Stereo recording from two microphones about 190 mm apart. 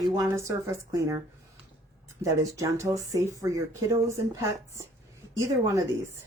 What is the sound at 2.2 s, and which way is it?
Speech, 15° right (ahead or behind).